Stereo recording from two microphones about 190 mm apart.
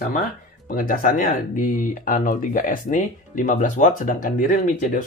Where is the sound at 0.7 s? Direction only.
45° left (ahead or behind).